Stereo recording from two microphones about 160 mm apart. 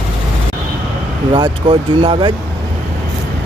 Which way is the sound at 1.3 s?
30° right (ahead or behind).